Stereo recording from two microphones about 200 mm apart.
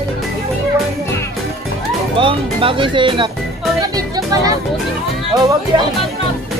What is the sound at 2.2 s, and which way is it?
Speech, 25° right (ahead or behind).